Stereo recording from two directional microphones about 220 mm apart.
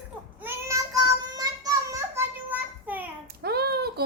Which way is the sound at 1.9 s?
10° right (ahead or behind).